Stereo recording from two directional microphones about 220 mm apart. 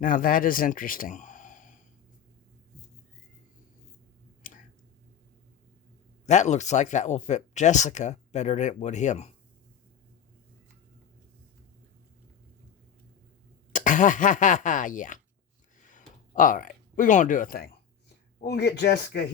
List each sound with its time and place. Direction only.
0.0 s speech: 40° left (ahead or behind)
4.4 s a sound: 35° left (ahead or behind)
6.2 s speech: 30° left (ahead or behind)
13.7 s speech: 35° left (ahead or behind)
15.9 s a sound: 35° left (ahead or behind)
18.4 s speech: 50° left (ahead or behind)